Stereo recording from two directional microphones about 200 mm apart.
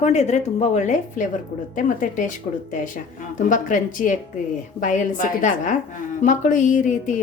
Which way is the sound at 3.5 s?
40° left (ahead or behind).